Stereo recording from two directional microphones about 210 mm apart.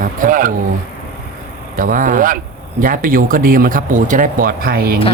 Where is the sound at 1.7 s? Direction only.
40° right (ahead or behind).